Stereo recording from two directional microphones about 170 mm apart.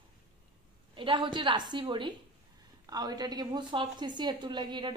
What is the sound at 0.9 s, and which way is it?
A woman's voice, 30° right (ahead or behind).